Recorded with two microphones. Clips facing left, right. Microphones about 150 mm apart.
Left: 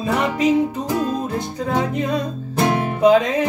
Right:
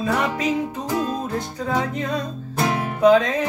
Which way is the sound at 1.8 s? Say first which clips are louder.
Left 4 dB; 15° left (ahead or behind).